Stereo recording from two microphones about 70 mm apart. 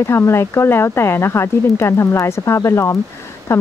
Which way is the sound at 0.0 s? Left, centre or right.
Left.